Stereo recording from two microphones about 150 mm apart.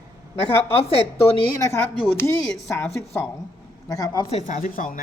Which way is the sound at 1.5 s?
15° left (ahead or behind).